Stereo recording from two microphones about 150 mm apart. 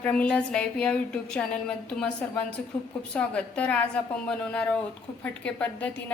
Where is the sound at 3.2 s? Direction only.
5° left (ahead or behind).